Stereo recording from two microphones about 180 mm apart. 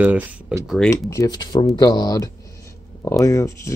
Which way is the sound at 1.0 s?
20° left (ahead or behind).